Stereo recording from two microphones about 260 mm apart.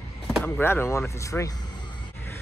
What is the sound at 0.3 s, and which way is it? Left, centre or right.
Speech, centre.